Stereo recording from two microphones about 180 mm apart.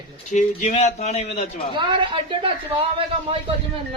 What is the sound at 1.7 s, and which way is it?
Speech, 25° right (ahead or behind).